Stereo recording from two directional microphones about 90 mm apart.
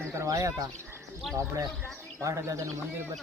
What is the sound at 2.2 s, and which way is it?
Speech, 35° right (ahead or behind).